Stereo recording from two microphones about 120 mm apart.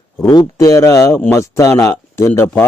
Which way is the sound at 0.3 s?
30° left (ahead or behind).